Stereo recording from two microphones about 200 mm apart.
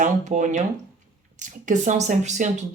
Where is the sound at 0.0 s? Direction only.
40° right (ahead or behind).